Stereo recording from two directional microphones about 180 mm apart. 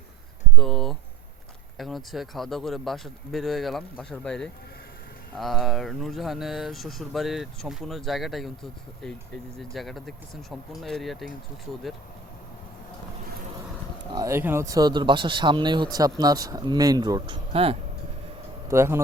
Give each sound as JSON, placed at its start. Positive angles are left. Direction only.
{"t": 0.5, "sound": "a sound", "side_deg": 0}
{"t": 1.8, "sound": "speech", "side_deg": 0}
{"t": 14.1, "sound": "speech", "side_deg": -20}
{"t": 18.7, "sound": "speech", "side_deg": -15}